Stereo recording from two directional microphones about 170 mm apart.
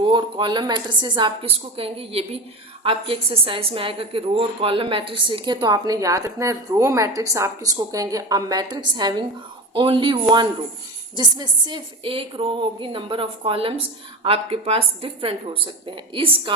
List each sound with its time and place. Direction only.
0.0 s a woman's voice: 30° right (ahead or behind)